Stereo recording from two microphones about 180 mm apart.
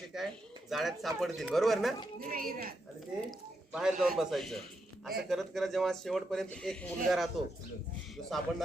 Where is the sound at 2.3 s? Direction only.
55° right (ahead or behind).